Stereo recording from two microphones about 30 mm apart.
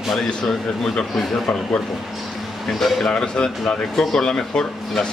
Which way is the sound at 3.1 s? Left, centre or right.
Left.